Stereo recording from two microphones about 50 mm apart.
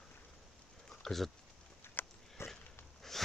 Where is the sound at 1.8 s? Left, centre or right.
Left.